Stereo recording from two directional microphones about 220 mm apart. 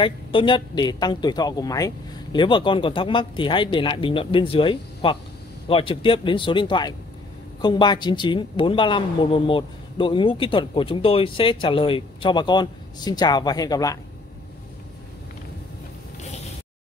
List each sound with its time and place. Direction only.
0.0 s a woman's voice: 25° left (ahead or behind)